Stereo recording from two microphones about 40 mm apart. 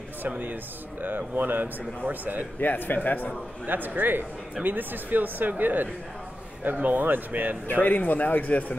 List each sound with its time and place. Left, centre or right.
1.0 s speech: right
2.6 s a man's voice: left
3.6 s speech: right
7.7 s a man's voice: left